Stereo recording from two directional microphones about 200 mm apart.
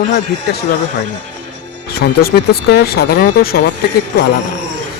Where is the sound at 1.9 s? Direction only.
50° left (ahead or behind).